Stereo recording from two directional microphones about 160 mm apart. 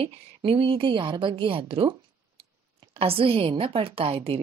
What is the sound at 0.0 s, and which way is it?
A woman's voice, 35° right (ahead or behind).